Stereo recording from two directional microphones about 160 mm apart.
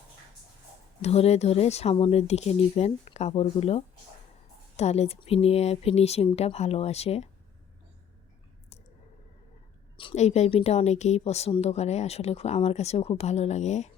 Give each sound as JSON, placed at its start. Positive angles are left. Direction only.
{"t": 1.0, "sound": "speech", "side_deg": 40}
{"t": 10.2, "sound": "speech", "side_deg": 45}